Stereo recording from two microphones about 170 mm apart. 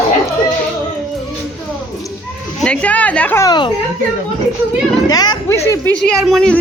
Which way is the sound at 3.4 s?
25° left (ahead or behind).